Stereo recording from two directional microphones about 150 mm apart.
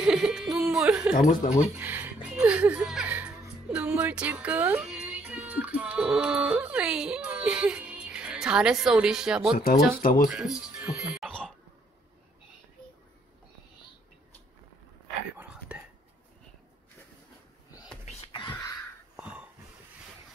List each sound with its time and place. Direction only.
0.0 s speech: 5° right (ahead or behind)
1.8 s a sound: 15° right (ahead or behind)
2.2 s speech: 10° right (ahead or behind)
10.0 s speech: 70° left (ahead or behind)
10.3 s speech: 5° right (ahead or behind)
15.3 s whispering: 10° right (ahead or behind)
19.1 s wheeze: 5° right (ahead or behind)